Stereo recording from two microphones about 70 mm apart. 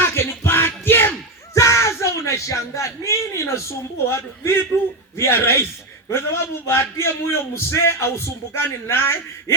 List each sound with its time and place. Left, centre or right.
0.0 s music: left
1.5 s a sound: left
5.1 s a man's voice: left